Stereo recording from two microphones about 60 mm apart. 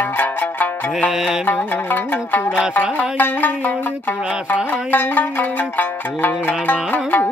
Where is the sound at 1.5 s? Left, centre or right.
Left.